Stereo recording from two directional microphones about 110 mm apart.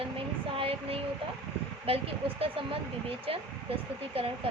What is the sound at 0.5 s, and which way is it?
Speech, 60° right (ahead or behind).